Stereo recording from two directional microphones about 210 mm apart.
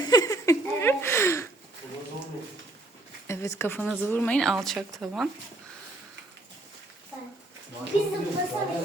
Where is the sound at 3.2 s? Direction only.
15° left (ahead or behind).